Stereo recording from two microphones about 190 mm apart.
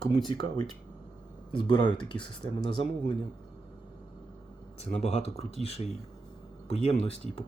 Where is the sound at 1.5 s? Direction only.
25° left (ahead or behind).